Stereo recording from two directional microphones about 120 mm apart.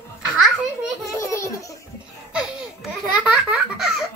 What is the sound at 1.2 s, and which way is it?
Laughter, 25° left (ahead or behind).